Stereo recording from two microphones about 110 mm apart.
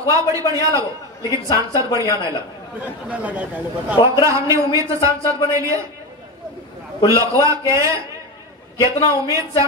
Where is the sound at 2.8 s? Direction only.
15° right (ahead or behind).